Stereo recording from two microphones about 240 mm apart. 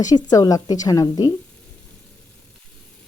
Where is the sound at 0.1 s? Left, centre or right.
Centre.